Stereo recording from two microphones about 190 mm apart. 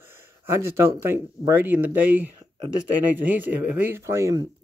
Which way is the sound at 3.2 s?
10° right (ahead or behind).